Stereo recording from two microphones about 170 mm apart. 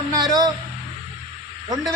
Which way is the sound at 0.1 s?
20° right (ahead or behind).